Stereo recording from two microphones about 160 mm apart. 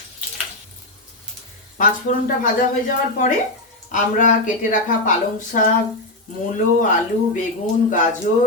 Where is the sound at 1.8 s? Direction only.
55° left (ahead or behind).